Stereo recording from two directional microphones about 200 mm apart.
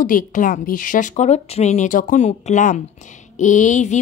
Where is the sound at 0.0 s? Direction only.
40° left (ahead or behind).